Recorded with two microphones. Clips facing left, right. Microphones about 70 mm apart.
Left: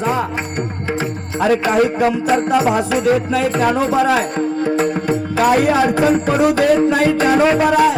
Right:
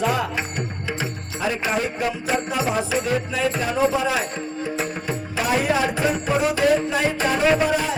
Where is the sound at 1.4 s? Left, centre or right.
Left.